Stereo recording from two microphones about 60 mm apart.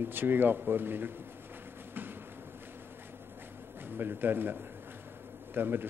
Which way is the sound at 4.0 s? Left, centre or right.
Right.